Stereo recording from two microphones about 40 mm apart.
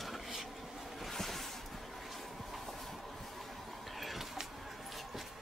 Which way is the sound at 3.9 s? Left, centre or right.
Centre.